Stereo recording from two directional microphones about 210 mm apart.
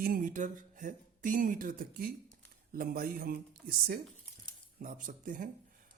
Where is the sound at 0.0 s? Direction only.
40° right (ahead or behind).